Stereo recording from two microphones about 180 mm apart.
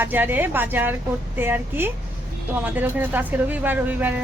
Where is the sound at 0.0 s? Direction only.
10° right (ahead or behind).